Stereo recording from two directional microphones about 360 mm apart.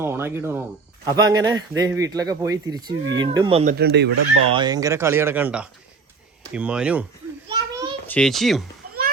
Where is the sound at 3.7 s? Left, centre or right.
Right.